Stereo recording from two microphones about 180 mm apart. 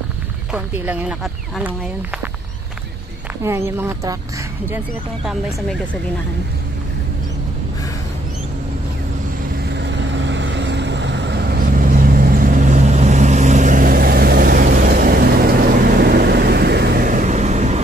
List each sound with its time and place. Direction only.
0.5 s speech: 10° right (ahead or behind)
3.4 s speech: 15° right (ahead or behind)
9.8 s vehicle: 80° right; by 17.7 s 40° right (ahead or behind)